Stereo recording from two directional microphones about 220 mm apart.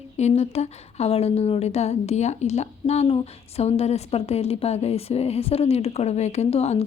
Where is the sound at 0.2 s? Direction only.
30° left (ahead or behind).